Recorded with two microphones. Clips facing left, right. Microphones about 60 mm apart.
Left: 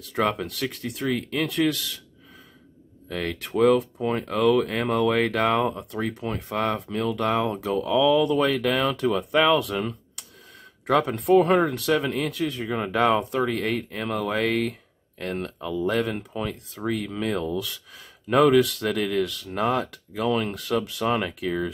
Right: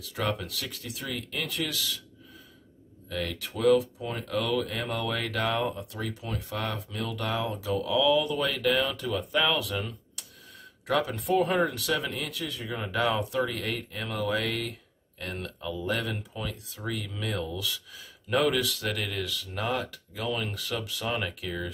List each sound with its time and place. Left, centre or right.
0.1 s speech: left
3.1 s speech: left
10.9 s speech: left
11.7 s speech: left